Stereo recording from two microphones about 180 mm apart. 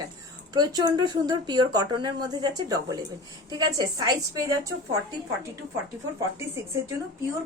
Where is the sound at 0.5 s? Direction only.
20° right (ahead or behind).